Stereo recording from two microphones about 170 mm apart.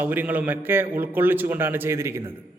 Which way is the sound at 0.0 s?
10° right (ahead or behind).